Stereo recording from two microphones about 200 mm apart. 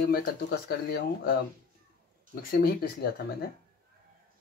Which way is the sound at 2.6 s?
50° left (ahead or behind).